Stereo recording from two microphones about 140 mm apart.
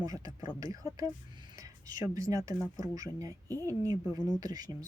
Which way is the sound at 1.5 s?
25° right (ahead or behind).